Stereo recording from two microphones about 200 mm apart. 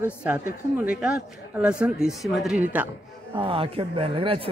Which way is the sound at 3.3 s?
25° right (ahead or behind).